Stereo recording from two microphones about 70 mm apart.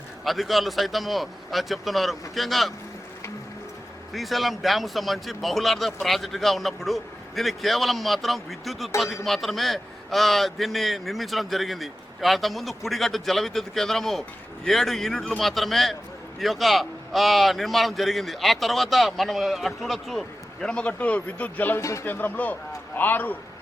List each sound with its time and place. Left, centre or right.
0.3 s a man's voice: centre
4.1 s a man's voice: centre; by 21.8 s left
21.8 s speech: left
22.0 s speech: left